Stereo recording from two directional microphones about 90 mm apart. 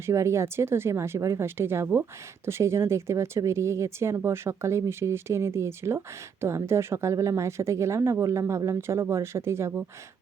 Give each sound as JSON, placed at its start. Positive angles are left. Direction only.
{"t": 0.0, "sound": "speech", "side_deg": -35}